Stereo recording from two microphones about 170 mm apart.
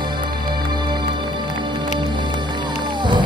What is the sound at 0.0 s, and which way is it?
Music, 25° right (ahead or behind).